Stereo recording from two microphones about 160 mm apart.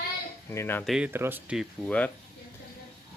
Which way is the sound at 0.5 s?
15° left (ahead or behind).